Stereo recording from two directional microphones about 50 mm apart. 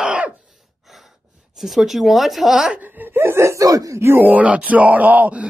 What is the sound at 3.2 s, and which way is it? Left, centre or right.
Speech, right.